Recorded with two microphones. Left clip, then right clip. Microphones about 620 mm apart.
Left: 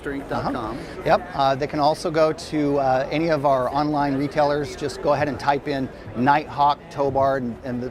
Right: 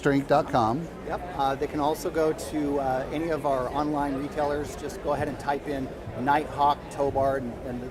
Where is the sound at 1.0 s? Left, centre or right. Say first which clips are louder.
Left 9 dB; left.